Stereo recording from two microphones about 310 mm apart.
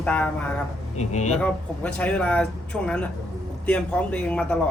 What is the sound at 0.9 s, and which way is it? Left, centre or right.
Speech, left.